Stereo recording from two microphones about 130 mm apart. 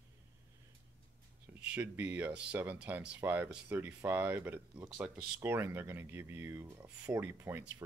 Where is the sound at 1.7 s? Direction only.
15° right (ahead or behind).